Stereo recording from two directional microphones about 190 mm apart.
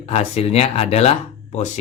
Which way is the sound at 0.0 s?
35° left (ahead or behind).